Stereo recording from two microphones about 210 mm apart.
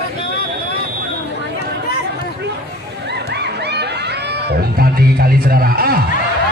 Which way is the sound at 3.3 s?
50° right (ahead or behind).